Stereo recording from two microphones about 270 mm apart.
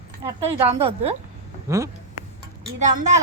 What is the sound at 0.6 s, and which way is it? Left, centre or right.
A woman's voice, right.